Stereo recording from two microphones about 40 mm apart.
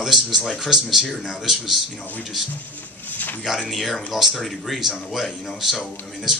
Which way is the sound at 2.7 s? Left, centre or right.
Left.